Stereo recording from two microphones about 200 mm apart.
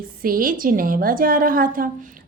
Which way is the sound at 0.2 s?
45° right (ahead or behind).